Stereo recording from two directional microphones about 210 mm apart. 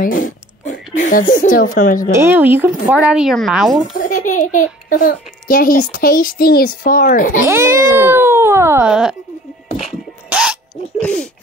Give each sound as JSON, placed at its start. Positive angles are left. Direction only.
{"t": 0.0, "sound": "a sound", "side_deg": 40}
{"t": 1.4, "sound": "a woman's voice", "side_deg": 40}
{"t": 2.1, "sound": "speech", "side_deg": -10}
{"t": 3.9, "sound": "a woman's voice", "side_deg": 40}
{"t": 7.4, "sound": "speech", "side_deg": -10}
{"t": 9.8, "sound": "a sound", "side_deg": -5}